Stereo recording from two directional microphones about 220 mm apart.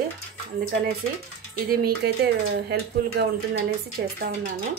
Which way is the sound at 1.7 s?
45° right (ahead or behind).